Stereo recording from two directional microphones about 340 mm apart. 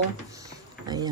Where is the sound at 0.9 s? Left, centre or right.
Centre.